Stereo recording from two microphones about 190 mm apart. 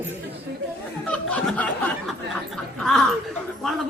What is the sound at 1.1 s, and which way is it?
Chuckle, 5° left (ahead or behind).